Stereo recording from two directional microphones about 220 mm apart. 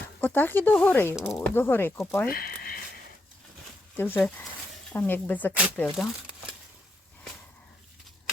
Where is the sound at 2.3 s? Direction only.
40° left (ahead or behind).